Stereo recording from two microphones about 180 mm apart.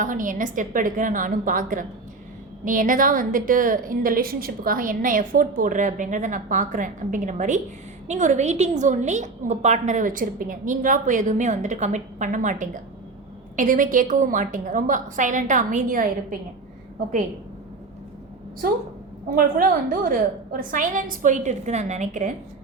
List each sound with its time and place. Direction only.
0.0 s a woman's voice: 45° right (ahead or behind)
19.3 s a woman's voice: 50° right (ahead or behind)